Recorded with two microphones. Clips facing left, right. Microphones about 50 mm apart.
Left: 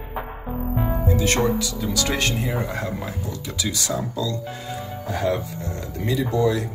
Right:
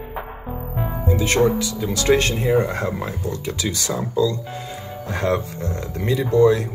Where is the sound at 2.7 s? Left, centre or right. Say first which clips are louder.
Right 3 dB; right.